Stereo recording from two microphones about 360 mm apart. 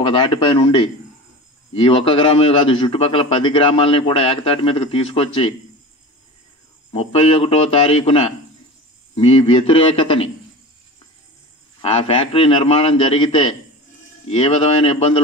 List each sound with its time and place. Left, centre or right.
0.0 s a man's voice: centre
6.9 s a man's voice: centre
11.8 s a man's voice: centre